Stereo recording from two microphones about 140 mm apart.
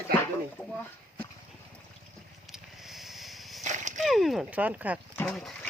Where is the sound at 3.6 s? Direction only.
60° right (ahead or behind).